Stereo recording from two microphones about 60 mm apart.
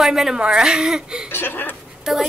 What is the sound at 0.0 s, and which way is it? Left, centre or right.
A woman's voice, centre.